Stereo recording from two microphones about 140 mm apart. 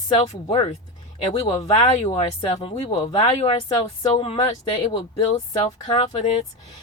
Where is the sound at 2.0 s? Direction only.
40° left (ahead or behind).